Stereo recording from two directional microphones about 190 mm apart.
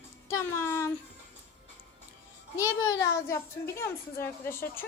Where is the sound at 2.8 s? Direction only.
15° left (ahead or behind).